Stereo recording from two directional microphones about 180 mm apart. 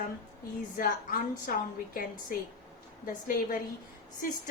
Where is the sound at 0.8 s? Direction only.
50° left (ahead or behind).